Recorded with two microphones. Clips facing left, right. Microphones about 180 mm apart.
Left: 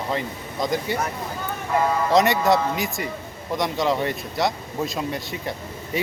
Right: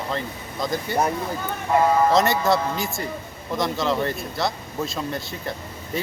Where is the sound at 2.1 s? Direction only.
15° left (ahead or behind).